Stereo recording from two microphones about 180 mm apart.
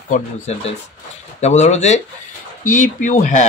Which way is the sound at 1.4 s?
40° left (ahead or behind).